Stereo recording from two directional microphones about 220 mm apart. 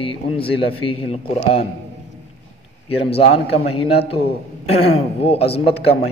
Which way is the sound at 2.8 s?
25° left (ahead or behind).